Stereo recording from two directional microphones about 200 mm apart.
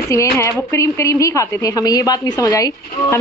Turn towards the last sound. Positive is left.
turn(degrees=15)  # may be behind; listen again after turning